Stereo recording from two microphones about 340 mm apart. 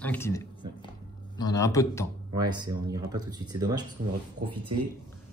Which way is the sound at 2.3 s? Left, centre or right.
Centre.